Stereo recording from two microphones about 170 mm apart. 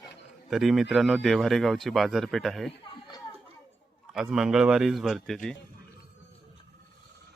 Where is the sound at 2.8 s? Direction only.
25° left (ahead or behind).